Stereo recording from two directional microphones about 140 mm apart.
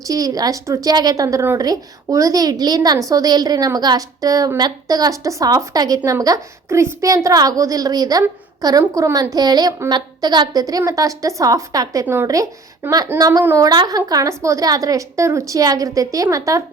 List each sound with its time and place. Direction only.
0.1 s a woman's voice: 25° right (ahead or behind)
13.4 s a woman's voice: 15° right (ahead or behind)
13.7 s a woman's voice: 30° right (ahead or behind)